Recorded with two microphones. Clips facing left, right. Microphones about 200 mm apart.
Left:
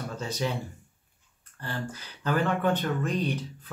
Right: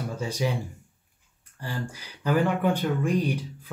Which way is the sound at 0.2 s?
10° right (ahead or behind).